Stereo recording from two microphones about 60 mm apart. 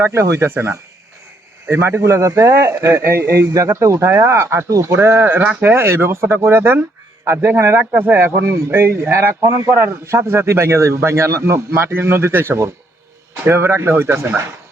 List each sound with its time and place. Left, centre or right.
0.0 s a man's voice: right
3.5 s a man's voice: right
9.0 s a man's voice: right